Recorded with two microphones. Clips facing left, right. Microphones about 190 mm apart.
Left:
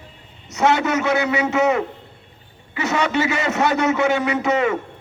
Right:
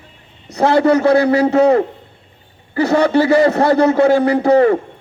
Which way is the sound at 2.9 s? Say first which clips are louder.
Right 9 dB; 60° right (ahead or behind).